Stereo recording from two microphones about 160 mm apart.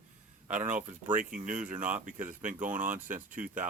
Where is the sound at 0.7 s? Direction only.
10° right (ahead or behind).